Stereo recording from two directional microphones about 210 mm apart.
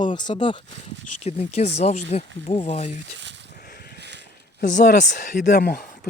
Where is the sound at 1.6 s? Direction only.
30° left (ahead or behind).